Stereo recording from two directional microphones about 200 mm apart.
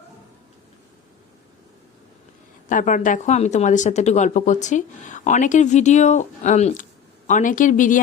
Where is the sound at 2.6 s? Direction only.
40° left (ahead or behind).